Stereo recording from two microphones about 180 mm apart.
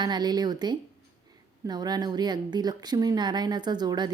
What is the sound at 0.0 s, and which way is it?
A woman's voice, 25° right (ahead or behind).